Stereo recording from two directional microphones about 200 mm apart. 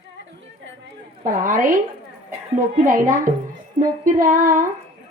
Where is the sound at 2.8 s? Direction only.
40° right (ahead or behind).